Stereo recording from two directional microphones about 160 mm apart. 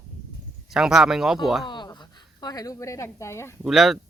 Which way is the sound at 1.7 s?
30° left (ahead or behind).